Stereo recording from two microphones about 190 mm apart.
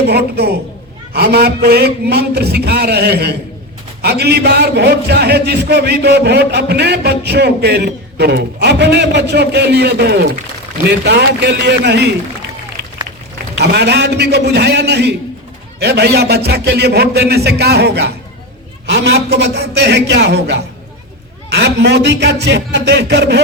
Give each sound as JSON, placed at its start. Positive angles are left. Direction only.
{"t": 0.1, "sound": "a man's voice", "side_deg": -55}
{"t": 13.6, "sound": "a man's voice", "side_deg": -60}